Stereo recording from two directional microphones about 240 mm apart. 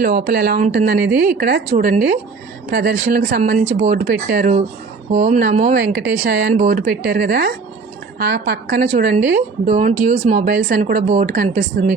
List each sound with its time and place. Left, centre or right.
0.0 s a woman's voice: right